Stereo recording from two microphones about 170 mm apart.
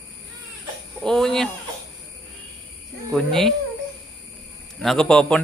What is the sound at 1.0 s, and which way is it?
Speech, 5° left (ahead or behind).